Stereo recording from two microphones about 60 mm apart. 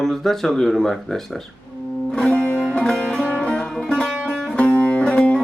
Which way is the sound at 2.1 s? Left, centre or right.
Centre.